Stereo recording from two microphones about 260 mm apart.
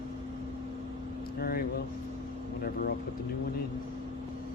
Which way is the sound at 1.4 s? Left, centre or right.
Left.